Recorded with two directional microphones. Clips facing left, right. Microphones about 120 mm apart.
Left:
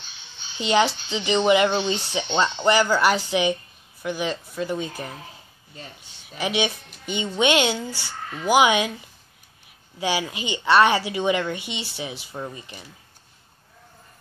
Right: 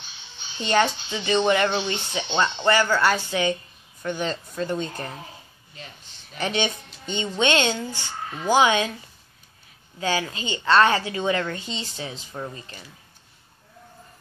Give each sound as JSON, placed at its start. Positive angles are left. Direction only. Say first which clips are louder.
{"t": 0.6, "sound": "a woman's voice", "louder": "left 1 dB", "side_deg": 15}
{"t": 6.2, "sound": "a woman's voice", "louder": "left 1 dB", "side_deg": 10}
{"t": 7.9, "sound": "speech", "louder": "right 1 dB", "side_deg": -20}
{"t": 8.5, "sound": "a woman's voice", "louder": "left 1 dB", "side_deg": 15}
{"t": 9.9, "sound": "a woman's voice", "louder": "even", "side_deg": 10}